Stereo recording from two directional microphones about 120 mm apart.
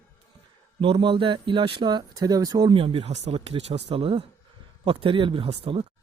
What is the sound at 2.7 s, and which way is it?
Speech, 50° right (ahead or behind).